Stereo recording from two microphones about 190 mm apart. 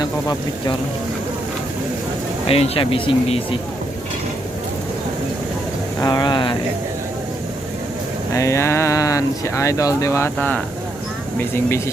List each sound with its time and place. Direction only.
0.0 s speech: 20° left (ahead or behind)
2.5 s speech: 30° left (ahead or behind)
6.0 s speech: 20° left (ahead or behind)
8.3 s speech: 15° left (ahead or behind)